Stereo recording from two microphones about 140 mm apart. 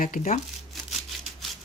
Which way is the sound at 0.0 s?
70° left (ahead or behind).